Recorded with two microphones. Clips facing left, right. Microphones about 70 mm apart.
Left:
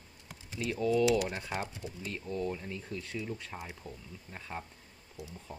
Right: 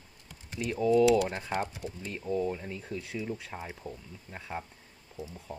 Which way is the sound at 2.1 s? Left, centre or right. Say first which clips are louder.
Right 4 dB; centre.